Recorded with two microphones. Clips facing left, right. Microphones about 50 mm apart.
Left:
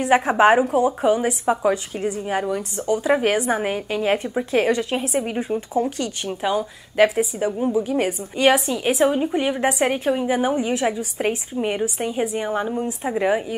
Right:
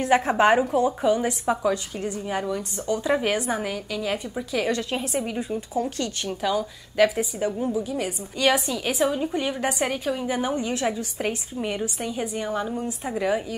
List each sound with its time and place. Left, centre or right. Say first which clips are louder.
0.0 s a woman's voice: left 3 dB; centre